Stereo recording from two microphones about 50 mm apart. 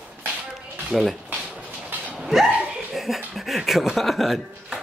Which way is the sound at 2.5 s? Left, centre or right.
Right.